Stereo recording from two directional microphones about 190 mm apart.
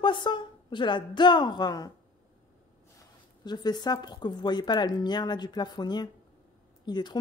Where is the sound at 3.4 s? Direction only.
20° left (ahead or behind).